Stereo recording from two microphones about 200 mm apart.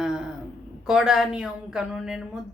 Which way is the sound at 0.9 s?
Centre (ahead or behind).